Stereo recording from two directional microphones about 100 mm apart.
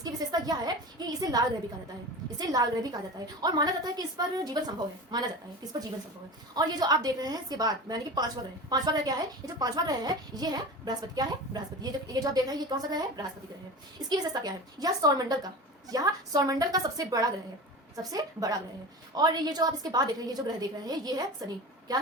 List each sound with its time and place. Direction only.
0.0 s a woman's voice: 40° right (ahead or behind)
6.5 s a woman's voice: 45° right (ahead or behind)